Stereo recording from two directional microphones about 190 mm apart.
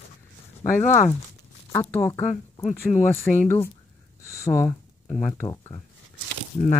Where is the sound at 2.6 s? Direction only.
40° left (ahead or behind).